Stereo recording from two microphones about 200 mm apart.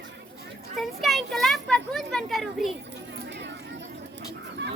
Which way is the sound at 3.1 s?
60° right (ahead or behind).